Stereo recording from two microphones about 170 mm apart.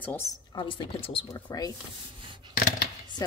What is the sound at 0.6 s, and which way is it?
A woman's voice, 30° left (ahead or behind).